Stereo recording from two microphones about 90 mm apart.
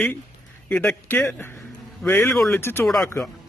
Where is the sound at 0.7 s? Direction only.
15° left (ahead or behind).